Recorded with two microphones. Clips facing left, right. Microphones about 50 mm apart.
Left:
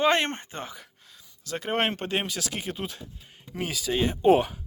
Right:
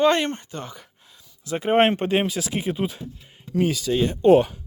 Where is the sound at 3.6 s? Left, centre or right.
Centre.